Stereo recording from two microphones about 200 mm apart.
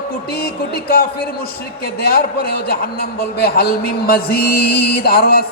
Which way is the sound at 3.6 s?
50° left (ahead or behind).